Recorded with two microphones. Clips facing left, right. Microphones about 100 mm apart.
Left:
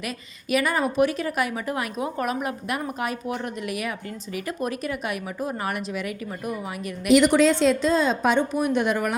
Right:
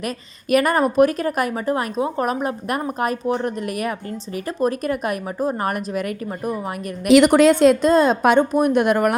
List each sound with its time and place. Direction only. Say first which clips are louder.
0.5 s a woman's voice: right 6 dB; 50° right (ahead or behind)
7.3 s a woman's voice: right 5 dB; 55° right (ahead or behind)